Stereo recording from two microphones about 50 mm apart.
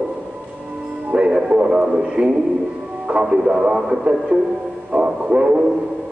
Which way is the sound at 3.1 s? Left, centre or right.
Centre.